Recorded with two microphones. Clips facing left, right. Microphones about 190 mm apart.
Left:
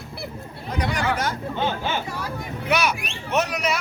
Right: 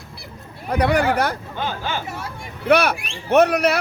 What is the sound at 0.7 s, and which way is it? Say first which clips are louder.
Speech: right 7 dB; 60° right (ahead or behind).